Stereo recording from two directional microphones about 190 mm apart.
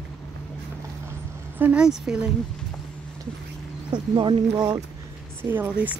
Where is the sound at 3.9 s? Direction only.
25° right (ahead or behind).